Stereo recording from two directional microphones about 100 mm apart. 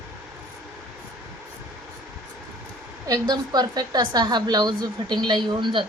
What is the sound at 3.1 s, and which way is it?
A woman's voice, 45° right (ahead or behind).